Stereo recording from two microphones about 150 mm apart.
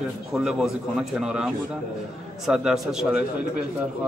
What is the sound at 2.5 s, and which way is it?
Speech, 5° right (ahead or behind).